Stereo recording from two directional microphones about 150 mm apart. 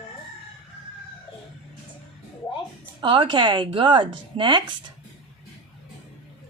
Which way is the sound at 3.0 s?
35° right (ahead or behind).